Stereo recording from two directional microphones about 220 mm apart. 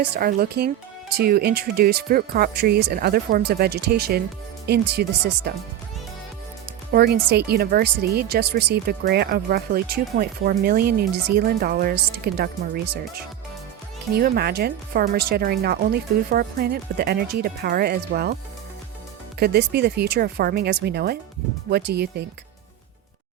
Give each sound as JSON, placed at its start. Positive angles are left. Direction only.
{"t": 0.0, "sound": "speech", "side_deg": -45}
{"t": 6.9, "sound": "speech", "side_deg": -45}
{"t": 14.1, "sound": "speech", "side_deg": -45}
{"t": 19.4, "sound": "speech", "side_deg": -50}